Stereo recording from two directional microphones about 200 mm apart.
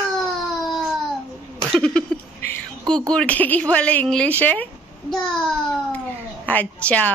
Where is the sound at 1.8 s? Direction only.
5° left (ahead or behind).